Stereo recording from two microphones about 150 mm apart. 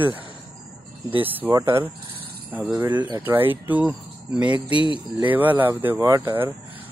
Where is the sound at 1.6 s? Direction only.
20° right (ahead or behind).